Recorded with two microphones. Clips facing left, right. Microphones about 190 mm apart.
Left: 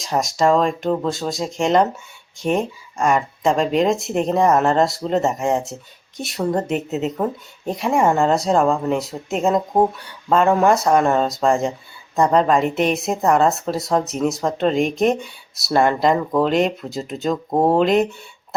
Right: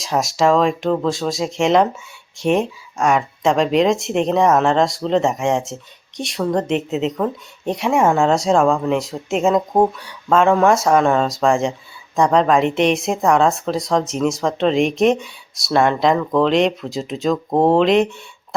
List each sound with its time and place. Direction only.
0.0 s speech: centre (ahead or behind)